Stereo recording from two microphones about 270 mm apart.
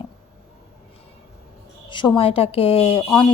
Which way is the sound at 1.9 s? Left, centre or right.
Centre.